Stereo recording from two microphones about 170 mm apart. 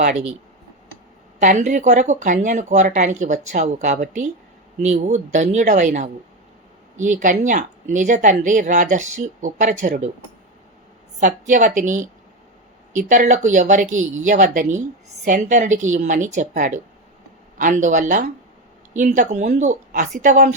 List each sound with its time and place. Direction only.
1.4 s speech: 45° right (ahead or behind)
11.2 s speech: 45° right (ahead or behind)